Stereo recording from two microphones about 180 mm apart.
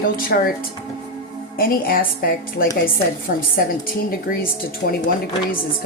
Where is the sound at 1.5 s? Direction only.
55° left (ahead or behind).